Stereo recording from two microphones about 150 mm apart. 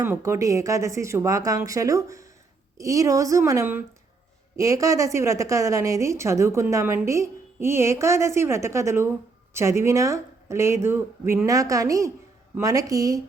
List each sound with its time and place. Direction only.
0.0 s a woman's voice: 20° right (ahead or behind)